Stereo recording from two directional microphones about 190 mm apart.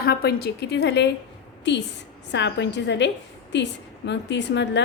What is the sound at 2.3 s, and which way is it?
A woman's voice, 70° left (ahead or behind).